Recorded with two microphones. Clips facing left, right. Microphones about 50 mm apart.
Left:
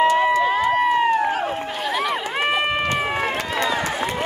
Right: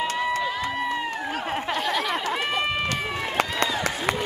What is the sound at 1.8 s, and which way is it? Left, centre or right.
Chatter, centre.